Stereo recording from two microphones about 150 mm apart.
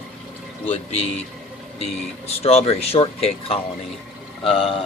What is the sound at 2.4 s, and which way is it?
Speech, 45° left (ahead or behind).